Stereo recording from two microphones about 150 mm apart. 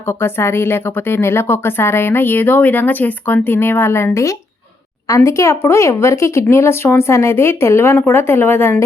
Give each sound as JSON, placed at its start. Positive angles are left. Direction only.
{"t": 0.1, "sound": "a woman's voice", "side_deg": 15}